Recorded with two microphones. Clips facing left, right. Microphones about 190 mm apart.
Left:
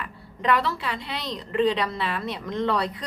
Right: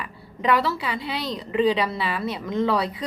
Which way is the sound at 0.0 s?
5° right (ahead or behind).